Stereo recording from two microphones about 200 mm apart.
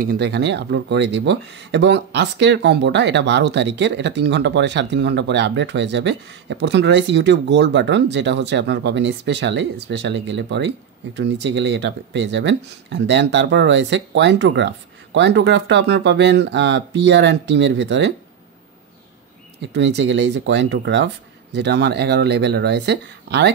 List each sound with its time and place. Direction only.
0.0 s speech: 50° right (ahead or behind)
19.7 s speech: 60° right (ahead or behind)